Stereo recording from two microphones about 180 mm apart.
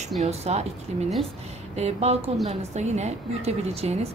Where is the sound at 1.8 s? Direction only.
35° right (ahead or behind).